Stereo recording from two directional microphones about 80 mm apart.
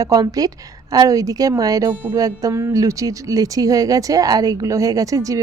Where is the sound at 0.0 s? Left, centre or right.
Right.